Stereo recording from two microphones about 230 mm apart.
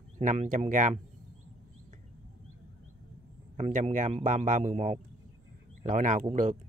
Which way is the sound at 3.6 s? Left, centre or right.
Right.